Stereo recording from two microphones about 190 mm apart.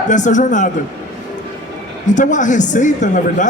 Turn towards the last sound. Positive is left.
turn(degrees=40)  # may be behind; listen again after turning